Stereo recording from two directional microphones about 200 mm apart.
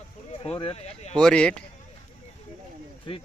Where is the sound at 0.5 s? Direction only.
30° left (ahead or behind).